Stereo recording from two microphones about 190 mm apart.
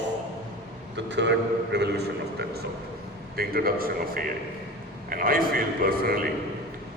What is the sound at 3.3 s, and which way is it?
A man's voice, 50° right (ahead or behind).